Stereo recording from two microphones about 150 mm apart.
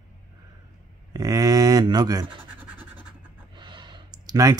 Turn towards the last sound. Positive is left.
turn(degrees=-25)  # may be behind; listen again after turning